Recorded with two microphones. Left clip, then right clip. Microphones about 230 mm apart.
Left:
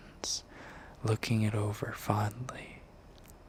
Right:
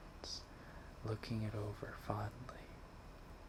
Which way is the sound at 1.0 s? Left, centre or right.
Left.